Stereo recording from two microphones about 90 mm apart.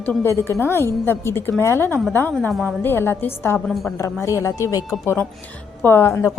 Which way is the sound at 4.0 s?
35° left (ahead or behind).